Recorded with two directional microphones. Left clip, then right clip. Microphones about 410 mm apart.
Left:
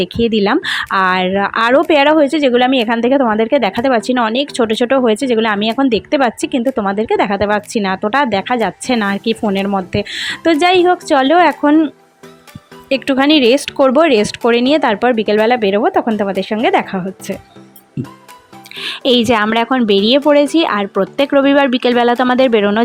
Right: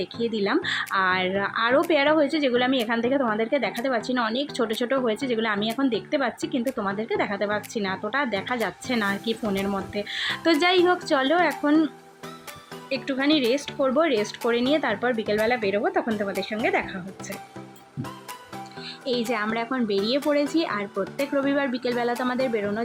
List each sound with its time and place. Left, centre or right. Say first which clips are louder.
0.2 s speech: left 11 dB; left
13.1 s speech: left 12 dB; left
18.9 s speech: left 15 dB; left